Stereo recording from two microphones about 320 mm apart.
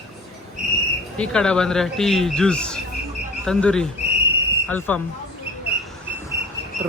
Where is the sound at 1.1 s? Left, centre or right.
Centre.